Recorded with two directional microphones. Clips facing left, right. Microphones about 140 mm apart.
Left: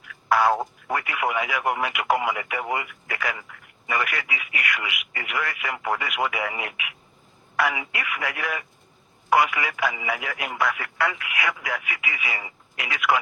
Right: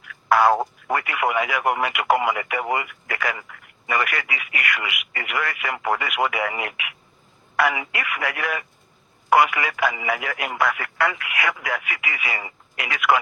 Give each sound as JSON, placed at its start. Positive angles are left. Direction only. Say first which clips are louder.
{"t": 0.1, "sound": "speech", "louder": "right 3 dB", "side_deg": -60}